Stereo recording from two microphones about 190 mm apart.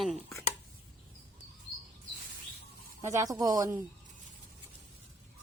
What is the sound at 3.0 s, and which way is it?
Speech, 15° right (ahead or behind).